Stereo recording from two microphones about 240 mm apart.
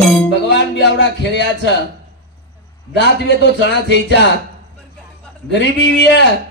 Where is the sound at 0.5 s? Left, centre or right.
Left.